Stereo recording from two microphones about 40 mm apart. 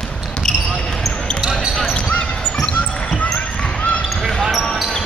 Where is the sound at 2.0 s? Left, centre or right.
Left.